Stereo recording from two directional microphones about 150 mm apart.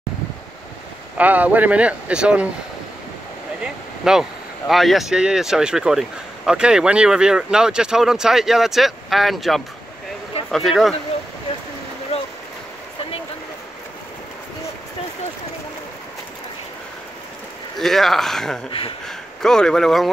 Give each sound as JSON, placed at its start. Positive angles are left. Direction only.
{"t": 1.1, "sound": "speech", "side_deg": -10}
{"t": 3.6, "sound": "speech", "side_deg": -5}
{"t": 17.7, "sound": "speech", "side_deg": 0}
{"t": 18.7, "sound": "speech", "side_deg": 40}
{"t": 19.0, "sound": "speech", "side_deg": 5}